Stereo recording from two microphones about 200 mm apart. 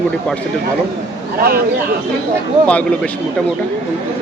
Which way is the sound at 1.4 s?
50° right (ahead or behind).